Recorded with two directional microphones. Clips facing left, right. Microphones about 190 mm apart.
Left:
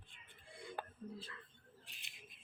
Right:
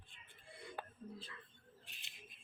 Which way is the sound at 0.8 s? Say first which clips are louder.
Left 2 dB; 45° left (ahead or behind).